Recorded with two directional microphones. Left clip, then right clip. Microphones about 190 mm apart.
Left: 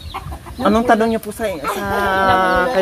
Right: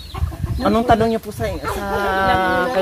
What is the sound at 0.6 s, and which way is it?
Speech, 25° left (ahead or behind).